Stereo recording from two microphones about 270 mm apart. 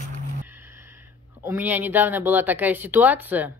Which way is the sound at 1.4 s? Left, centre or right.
Centre.